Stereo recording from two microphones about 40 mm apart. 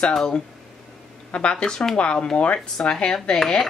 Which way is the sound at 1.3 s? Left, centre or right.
Left.